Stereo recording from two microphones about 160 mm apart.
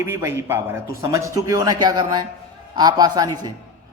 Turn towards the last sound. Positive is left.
turn(degrees=-25)  # may be behind; listen again after turning